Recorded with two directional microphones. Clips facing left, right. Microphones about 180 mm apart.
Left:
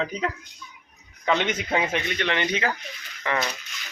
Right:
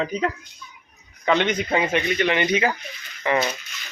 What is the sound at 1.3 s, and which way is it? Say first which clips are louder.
Speech: right 3 dB; centre (ahead or behind).